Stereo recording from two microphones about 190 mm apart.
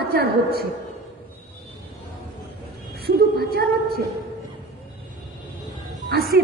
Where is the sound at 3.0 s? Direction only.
55° right (ahead or behind).